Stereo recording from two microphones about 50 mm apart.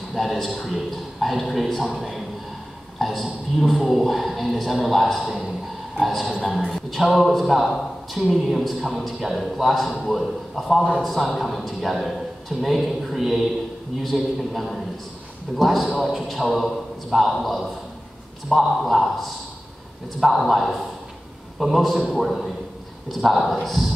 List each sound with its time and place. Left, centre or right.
0.1 s a man's voice: centre